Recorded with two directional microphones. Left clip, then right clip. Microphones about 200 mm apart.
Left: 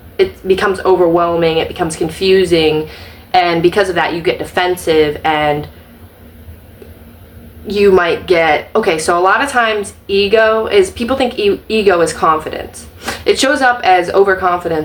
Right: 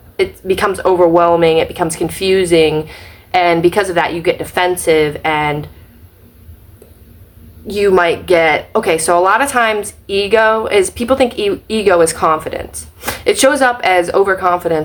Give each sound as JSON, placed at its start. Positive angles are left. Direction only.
{"t": 0.2, "sound": "speech", "side_deg": -15}
{"t": 7.7, "sound": "speech", "side_deg": -15}